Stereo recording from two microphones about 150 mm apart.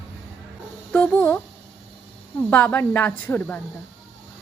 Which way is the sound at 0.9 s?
10° left (ahead or behind).